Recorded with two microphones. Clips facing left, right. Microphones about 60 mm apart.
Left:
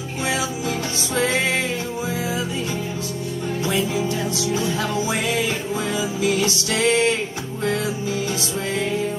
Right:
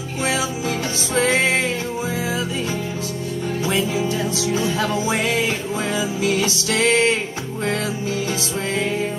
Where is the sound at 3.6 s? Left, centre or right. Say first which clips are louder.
Right 1 dB; right.